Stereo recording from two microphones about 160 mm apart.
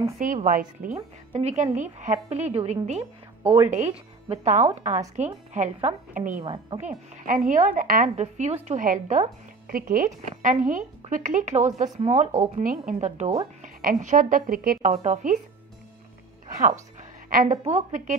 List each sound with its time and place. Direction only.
0.2 s a woman's voice: 55° right (ahead or behind)
1.3 s speech: 45° right (ahead or behind)
6.4 s speech: 30° right (ahead or behind)
7.2 s a woman's voice: 55° right (ahead or behind)
8.2 s speech: 45° right (ahead or behind)
8.6 s speech: 55° right (ahead or behind)
9.7 s a woman's voice: 60° right (ahead or behind)
14.9 s speech: 45° right (ahead or behind)
16.5 s speech: 55° right (ahead or behind)